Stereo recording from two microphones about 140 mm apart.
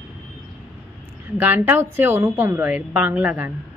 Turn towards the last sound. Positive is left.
turn(degrees=-10)  # may be behind; listen again after turning